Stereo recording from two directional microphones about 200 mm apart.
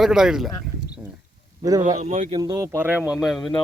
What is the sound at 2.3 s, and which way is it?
Speech, 20° right (ahead or behind).